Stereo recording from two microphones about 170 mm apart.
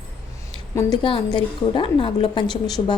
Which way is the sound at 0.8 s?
25° left (ahead or behind).